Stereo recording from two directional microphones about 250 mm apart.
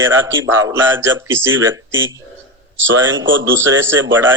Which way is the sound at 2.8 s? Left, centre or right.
Right.